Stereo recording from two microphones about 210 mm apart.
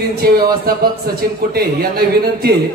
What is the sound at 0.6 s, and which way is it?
Speech, 45° right (ahead or behind).